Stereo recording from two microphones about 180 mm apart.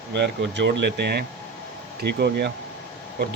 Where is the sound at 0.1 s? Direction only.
75° right (ahead or behind).